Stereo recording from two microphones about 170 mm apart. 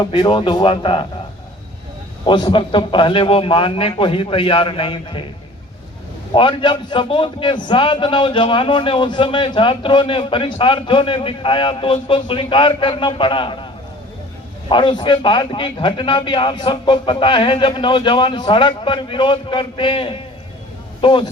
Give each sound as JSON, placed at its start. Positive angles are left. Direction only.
{"t": 0.0, "sound": "a man's voice", "side_deg": 25}
{"t": 2.2, "sound": "a man's voice", "side_deg": 30}
{"t": 6.3, "sound": "a man's voice", "side_deg": 30}
{"t": 14.7, "sound": "a man's voice", "side_deg": 25}